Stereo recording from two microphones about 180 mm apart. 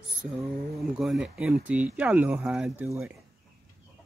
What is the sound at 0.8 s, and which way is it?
Speech, centre (ahead or behind).